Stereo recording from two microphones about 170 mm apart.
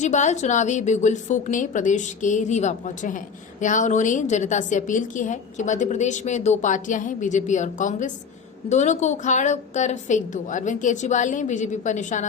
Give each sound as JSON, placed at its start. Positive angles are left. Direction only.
{"t": 0.0, "sound": "a woman's voice", "side_deg": 45}